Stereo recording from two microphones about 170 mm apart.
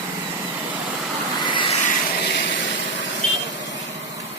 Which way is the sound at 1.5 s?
30° left (ahead or behind).